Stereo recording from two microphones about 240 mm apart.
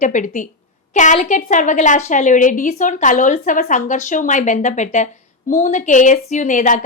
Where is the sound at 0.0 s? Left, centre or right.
Left.